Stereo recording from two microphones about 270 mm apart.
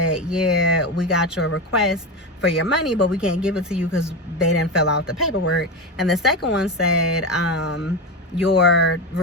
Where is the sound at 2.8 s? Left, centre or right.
Left.